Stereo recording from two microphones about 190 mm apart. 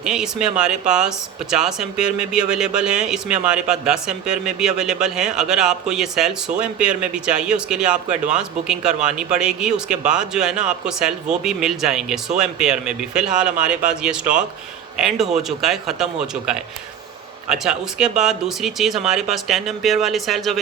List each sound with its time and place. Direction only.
0.0 s speech: 5° right (ahead or behind)